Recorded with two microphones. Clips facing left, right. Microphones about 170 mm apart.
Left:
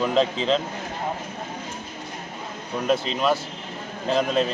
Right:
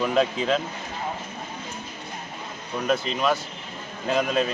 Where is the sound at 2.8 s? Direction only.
Centre (ahead or behind).